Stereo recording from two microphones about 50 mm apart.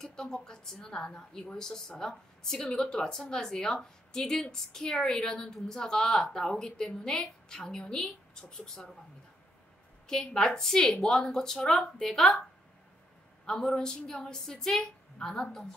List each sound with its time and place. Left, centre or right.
0.0 s a woman's voice: centre
10.0 s a woman's voice: centre
13.5 s a woman's voice: centre